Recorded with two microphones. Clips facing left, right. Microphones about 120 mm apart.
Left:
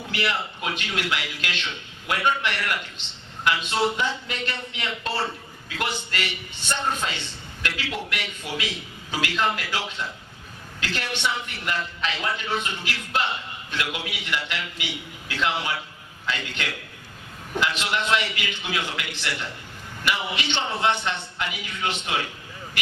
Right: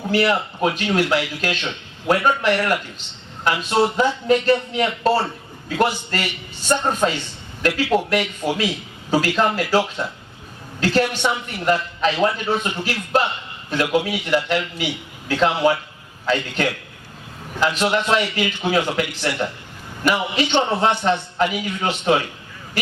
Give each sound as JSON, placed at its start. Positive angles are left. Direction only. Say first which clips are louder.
{"t": 0.1, "sound": "a man's voice", "louder": "right 9 dB", "side_deg": -40}